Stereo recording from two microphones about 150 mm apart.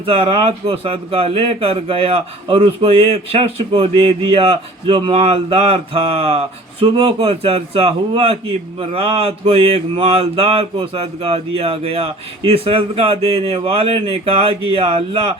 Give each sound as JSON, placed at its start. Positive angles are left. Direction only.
{"t": 0.0, "sound": "speech", "side_deg": -40}